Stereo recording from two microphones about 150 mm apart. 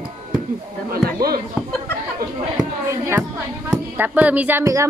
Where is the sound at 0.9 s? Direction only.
85° right.